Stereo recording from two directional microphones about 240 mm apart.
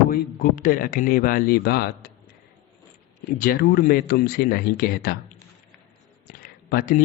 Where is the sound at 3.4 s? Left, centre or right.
Left.